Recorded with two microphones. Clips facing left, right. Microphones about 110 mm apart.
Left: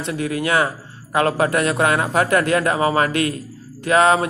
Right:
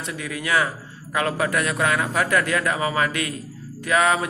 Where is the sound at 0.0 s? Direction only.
35° left (ahead or behind).